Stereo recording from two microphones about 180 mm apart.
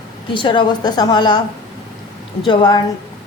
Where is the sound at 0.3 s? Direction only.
25° left (ahead or behind).